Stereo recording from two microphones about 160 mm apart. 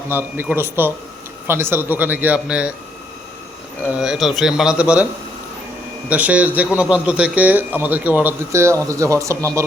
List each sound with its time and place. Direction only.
0.1 s a man's voice: 10° right (ahead or behind)
3.8 s speech: 5° right (ahead or behind)
6.1 s a man's voice: 10° right (ahead or behind)